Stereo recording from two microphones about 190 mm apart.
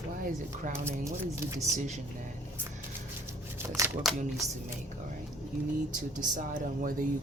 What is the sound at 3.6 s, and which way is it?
Shuffling cards, 15° right (ahead or behind).